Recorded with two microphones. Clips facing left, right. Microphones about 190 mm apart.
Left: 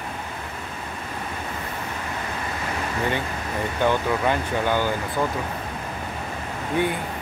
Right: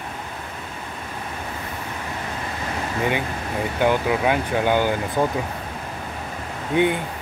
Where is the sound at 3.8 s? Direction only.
10° right (ahead or behind).